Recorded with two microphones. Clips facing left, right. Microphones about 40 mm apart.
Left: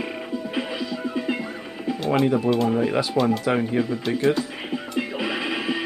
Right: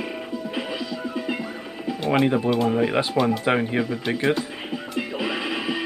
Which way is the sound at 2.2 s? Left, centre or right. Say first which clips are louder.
Even; right.